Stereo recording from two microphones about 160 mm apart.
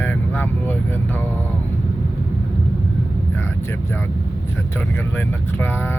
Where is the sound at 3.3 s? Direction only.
15° left (ahead or behind).